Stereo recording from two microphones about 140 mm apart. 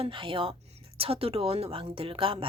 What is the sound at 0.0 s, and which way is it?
A woman's voice, 40° right (ahead or behind).